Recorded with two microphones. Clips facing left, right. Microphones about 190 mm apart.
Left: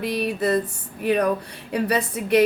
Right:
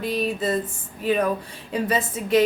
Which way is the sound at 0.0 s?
70° left (ahead or behind).